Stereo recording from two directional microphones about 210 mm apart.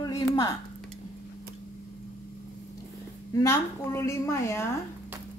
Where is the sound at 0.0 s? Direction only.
15° left (ahead or behind).